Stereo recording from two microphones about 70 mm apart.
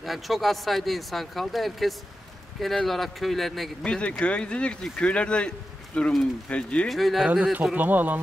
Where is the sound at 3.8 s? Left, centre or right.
Centre.